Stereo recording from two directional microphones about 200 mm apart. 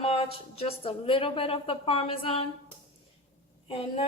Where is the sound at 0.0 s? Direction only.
30° left (ahead or behind).